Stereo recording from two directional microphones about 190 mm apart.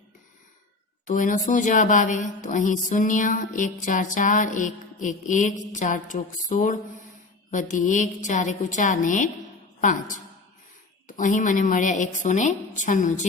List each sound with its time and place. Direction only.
1.0 s a woman's voice: 45° left (ahead or behind)
11.2 s a woman's voice: 40° left (ahead or behind)